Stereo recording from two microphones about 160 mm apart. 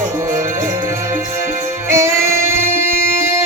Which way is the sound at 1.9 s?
15° right (ahead or behind).